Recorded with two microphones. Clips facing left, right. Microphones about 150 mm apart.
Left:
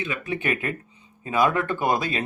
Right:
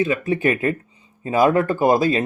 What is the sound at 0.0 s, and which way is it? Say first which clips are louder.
Speech: right 9 dB; 35° right (ahead or behind).